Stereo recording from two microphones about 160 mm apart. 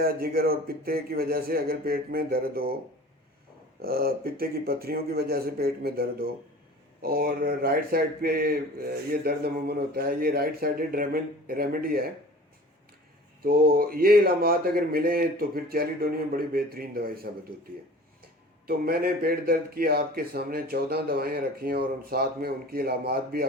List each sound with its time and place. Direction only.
0.0 s speech: 70° right (ahead or behind)
3.8 s speech: 70° right (ahead or behind)
13.4 s speech: 70° right (ahead or behind)
18.6 s speech: 70° right (ahead or behind)